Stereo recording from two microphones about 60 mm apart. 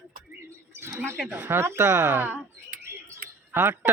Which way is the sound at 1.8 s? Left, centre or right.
Right.